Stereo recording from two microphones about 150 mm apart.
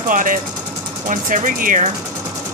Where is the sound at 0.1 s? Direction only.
60° right (ahead or behind).